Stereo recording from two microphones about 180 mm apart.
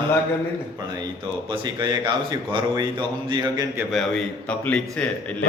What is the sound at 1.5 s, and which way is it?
Speech, 25° right (ahead or behind).